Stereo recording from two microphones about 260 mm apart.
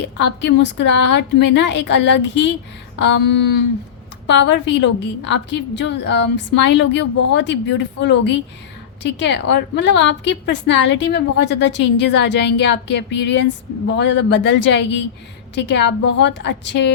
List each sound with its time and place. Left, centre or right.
0.0 s a woman's voice: left